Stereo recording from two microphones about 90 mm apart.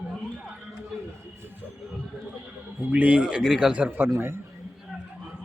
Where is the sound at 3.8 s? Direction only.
25° right (ahead or behind).